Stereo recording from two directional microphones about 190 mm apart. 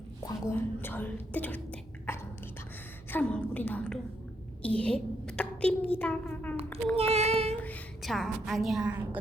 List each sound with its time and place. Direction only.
0.4 s a woman's voice: 10° left (ahead or behind)
6.9 s child singing: 30° right (ahead or behind)
7.5 s a woman's voice: 5° left (ahead or behind)